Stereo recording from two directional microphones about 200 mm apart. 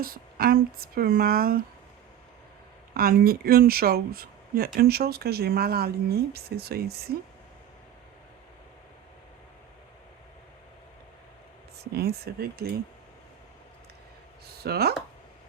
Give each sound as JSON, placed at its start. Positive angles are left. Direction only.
{"t": 0.0, "sound": "speech", "side_deg": -45}
{"t": 2.9, "sound": "speech", "side_deg": -50}
{"t": 11.8, "sound": "speech", "side_deg": -55}
{"t": 14.4, "sound": "speech", "side_deg": -50}